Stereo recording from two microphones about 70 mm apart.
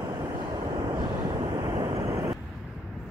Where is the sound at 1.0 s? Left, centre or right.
Right.